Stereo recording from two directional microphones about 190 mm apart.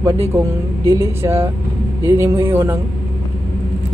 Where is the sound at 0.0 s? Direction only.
15° right (ahead or behind).